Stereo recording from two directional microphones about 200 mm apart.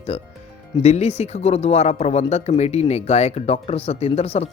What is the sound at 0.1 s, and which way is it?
Speech, 30° left (ahead or behind).